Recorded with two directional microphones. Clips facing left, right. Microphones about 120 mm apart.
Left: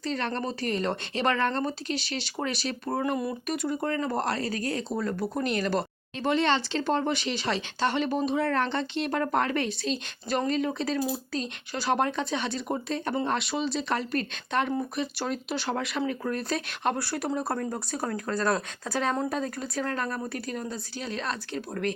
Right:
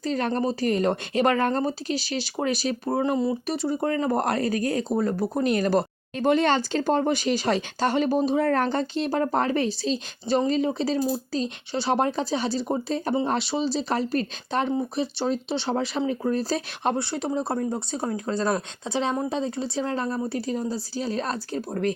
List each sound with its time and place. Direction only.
0.0 s speech: 40° right (ahead or behind)
3.0 s speech: 25° right (ahead or behind)
4.2 s speech: 50° right (ahead or behind); by 16.9 s 35° right (ahead or behind)
17.0 s speech: 20° right (ahead or behind)